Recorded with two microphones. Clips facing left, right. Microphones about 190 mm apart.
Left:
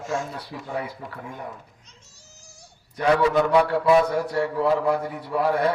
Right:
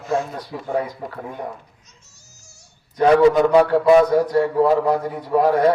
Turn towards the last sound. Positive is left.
turn(degrees=-40)  # may be behind; listen again after turning